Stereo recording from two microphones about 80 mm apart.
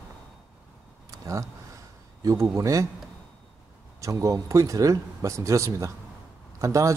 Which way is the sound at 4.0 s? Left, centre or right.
Right.